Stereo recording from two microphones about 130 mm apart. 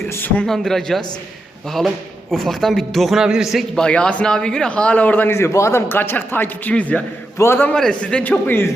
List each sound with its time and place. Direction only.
0.1 s a man's voice: 15° left (ahead or behind)
0.4 s speech: 5° left (ahead or behind)
2.3 s a man's voice: centre (ahead or behind); by 7.7 s 20° left (ahead or behind)
7.7 s a man's voice: 5° left (ahead or behind)